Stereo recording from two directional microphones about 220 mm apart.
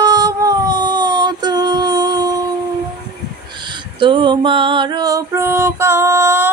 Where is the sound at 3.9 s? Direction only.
20° right (ahead or behind).